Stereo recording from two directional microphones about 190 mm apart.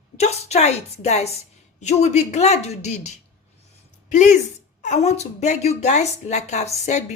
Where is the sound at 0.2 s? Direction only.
35° left (ahead or behind).